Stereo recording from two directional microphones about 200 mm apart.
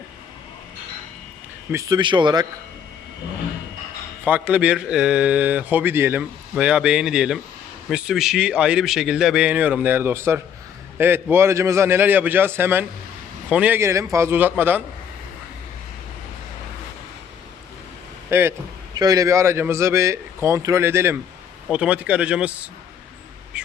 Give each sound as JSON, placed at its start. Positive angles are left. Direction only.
{"t": 1.7, "sound": "speech", "side_deg": -15}
{"t": 4.3, "sound": "a man's voice", "side_deg": -10}
{"t": 18.3, "sound": "speech", "side_deg": -10}
{"t": 23.5, "sound": "duck", "side_deg": -5}